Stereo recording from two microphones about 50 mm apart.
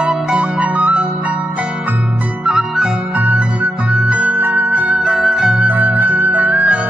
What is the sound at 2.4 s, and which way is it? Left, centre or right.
Music, centre.